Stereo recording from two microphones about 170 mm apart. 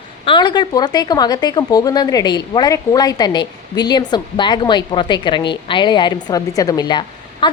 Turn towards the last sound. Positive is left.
turn(degrees=25)  # may be behind; listen again after turning